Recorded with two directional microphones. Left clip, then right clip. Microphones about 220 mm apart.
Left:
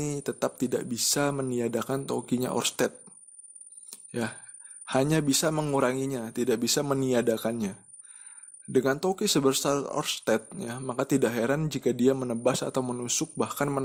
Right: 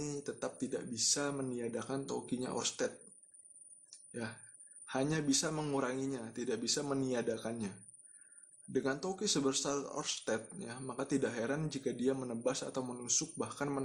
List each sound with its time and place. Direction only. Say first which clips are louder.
0.0 s speech: left 10 dB; 40° left (ahead or behind)
3.8 s a sound: left 11 dB; 40° left (ahead or behind)
4.9 s speech: left 9 dB; 35° left (ahead or behind)